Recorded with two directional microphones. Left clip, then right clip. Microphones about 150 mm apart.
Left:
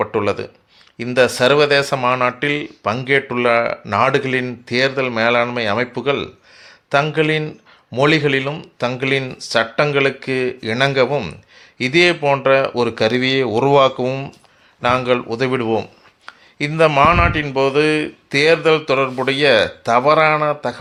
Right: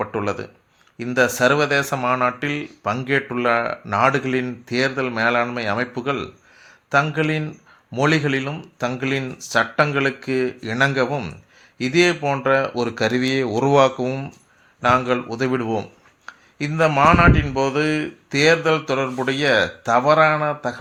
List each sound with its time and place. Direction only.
0.0 s speech: 35° left (ahead or behind)